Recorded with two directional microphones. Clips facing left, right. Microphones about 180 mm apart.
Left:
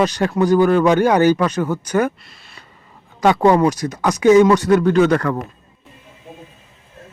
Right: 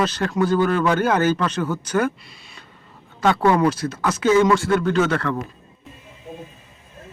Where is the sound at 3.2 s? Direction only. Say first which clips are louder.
Left 4 dB; 15° left (ahead or behind).